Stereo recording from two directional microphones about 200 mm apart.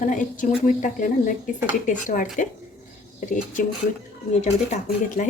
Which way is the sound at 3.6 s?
45° left (ahead or behind).